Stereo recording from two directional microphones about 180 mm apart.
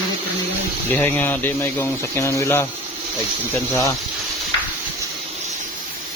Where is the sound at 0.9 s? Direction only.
10° left (ahead or behind).